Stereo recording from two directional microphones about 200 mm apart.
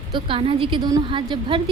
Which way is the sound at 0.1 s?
25° right (ahead or behind).